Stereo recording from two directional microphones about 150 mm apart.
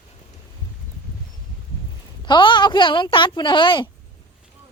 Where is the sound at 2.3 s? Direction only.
30° left (ahead or behind).